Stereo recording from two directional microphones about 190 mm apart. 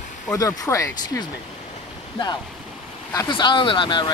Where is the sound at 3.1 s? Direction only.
20° left (ahead or behind).